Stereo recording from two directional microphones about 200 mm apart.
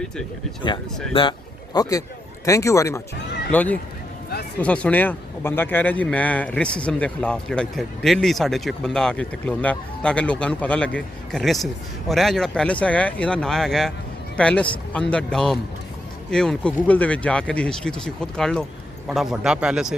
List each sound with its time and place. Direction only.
0.6 s a man's voice: 25° left (ahead or behind); by 19.9 s 5° right (ahead or behind)